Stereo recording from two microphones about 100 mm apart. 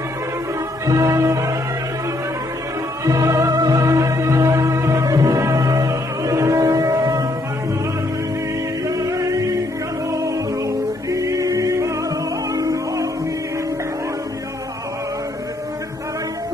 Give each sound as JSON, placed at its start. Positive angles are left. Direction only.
{"t": 0.8, "sound": "music", "side_deg": -35}
{"t": 3.1, "sound": "music", "side_deg": -35}
{"t": 8.8, "sound": "music", "side_deg": -35}